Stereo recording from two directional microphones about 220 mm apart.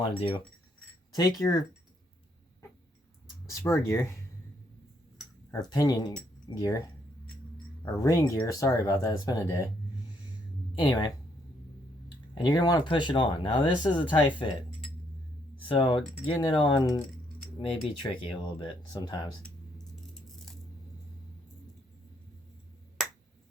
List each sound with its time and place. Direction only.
0.2 s speech: 25° left (ahead or behind)
3.5 s speech: 10° left (ahead or behind)
5.5 s speech: 15° left (ahead or behind)
10.8 s speech: 20° left (ahead or behind)
15.7 s speech: 25° left (ahead or behind)